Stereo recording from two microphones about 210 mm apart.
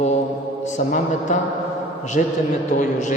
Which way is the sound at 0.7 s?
35° left (ahead or behind).